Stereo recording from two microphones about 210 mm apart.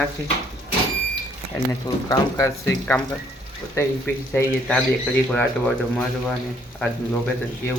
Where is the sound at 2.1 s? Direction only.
15° left (ahead or behind).